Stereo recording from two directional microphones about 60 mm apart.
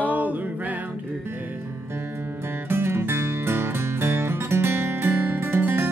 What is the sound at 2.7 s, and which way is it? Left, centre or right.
Music, right.